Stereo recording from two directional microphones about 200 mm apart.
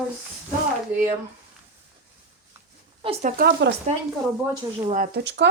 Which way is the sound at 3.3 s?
50° right (ahead or behind).